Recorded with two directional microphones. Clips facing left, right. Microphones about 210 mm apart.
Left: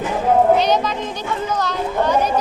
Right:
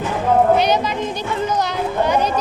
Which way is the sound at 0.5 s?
10° right (ahead or behind).